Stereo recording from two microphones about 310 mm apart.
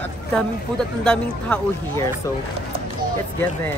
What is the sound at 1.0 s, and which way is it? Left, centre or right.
Speech, centre.